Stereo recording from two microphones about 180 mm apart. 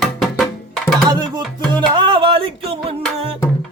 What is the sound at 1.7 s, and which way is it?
Music, 25° right (ahead or behind).